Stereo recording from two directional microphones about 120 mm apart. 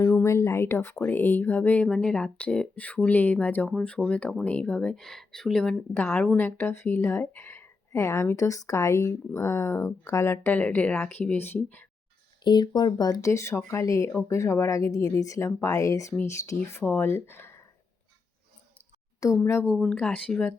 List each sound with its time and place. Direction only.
0.1 s speech: 20° left (ahead or behind); by 5.7 s 5° left (ahead or behind)
5.9 s a woman's voice: 15° left (ahead or behind)
12.5 s a woman's voice: 35° left (ahead or behind); by 17.6 s 20° left (ahead or behind)
19.5 s a woman's voice: 20° left (ahead or behind)
19.8 s speech: 10° left (ahead or behind)